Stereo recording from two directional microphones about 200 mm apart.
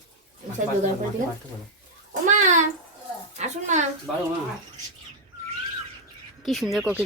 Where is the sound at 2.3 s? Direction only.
40° right (ahead or behind).